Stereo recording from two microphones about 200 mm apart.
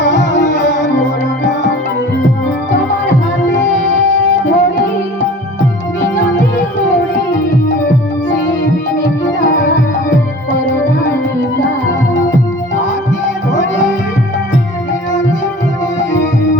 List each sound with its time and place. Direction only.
0.0 s music: 65° left (ahead or behind)
3.9 s music: 65° left (ahead or behind)
9.4 s music: 40° left (ahead or behind)
11.6 s music: 65° left (ahead or behind)